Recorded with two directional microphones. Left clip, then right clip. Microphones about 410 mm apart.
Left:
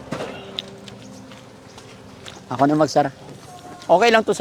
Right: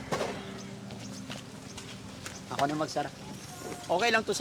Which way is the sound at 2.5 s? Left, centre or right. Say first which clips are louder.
Left 13 dB; left.